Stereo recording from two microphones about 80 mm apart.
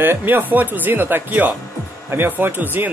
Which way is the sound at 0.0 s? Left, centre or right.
Right.